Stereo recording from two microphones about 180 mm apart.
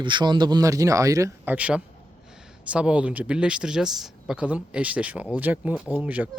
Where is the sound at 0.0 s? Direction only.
25° right (ahead or behind); by 6.4 s 10° right (ahead or behind).